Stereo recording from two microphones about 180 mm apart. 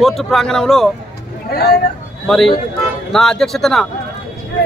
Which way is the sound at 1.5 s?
60° left (ahead or behind).